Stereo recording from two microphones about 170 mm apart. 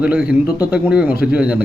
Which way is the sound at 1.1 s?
65° left (ahead or behind).